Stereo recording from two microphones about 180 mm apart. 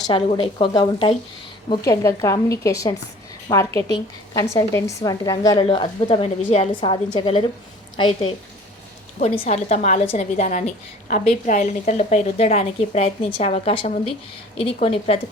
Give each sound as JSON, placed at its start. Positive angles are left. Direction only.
{"t": 0.1, "sound": "a woman's voice", "side_deg": 30}
{"t": 3.9, "sound": "a woman's voice", "side_deg": 20}
{"t": 5.5, "sound": "a woman's voice", "side_deg": 30}